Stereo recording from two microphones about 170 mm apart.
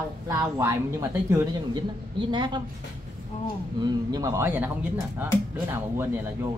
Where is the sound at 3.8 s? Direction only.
20° right (ahead or behind).